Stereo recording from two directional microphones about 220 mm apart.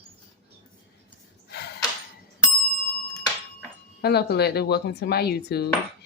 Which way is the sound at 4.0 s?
45° left (ahead or behind).